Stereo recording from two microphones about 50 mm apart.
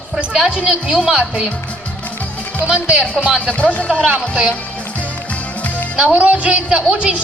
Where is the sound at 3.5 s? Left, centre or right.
Left.